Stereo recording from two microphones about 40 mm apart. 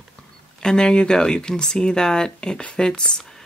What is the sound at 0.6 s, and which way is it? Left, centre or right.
Speech, centre.